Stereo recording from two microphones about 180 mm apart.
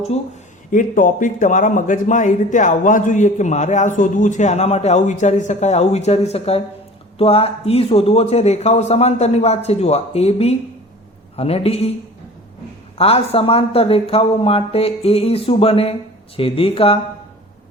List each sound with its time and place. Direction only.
0.7 s speech: 45° left (ahead or behind)
13.0 s speech: 35° left (ahead or behind)